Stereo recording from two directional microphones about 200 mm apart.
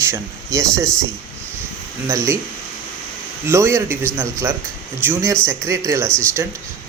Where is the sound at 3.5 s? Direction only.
10° right (ahead or behind).